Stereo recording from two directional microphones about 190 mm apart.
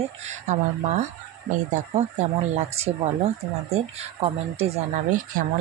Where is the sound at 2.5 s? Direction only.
35° right (ahead or behind).